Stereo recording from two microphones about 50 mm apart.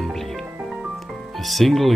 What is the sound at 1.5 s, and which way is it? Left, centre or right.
Speech, centre.